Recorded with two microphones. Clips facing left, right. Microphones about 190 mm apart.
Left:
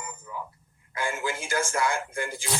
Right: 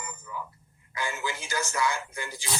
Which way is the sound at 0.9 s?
50° left (ahead or behind).